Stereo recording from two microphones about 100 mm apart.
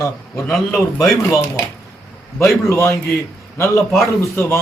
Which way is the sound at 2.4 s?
25° left (ahead or behind).